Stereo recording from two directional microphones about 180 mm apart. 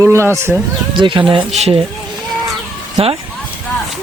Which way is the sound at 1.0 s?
25° right (ahead or behind).